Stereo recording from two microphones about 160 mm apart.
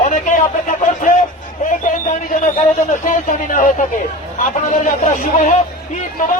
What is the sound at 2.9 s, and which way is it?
Speech, 55° left (ahead or behind).